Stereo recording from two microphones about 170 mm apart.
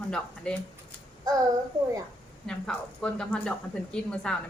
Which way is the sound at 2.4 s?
5° left (ahead or behind).